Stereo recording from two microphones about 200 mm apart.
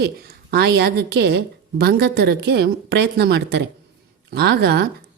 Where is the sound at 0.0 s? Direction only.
55° right (ahead or behind).